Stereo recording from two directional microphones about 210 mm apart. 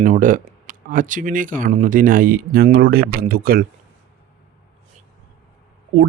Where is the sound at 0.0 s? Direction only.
40° right (ahead or behind).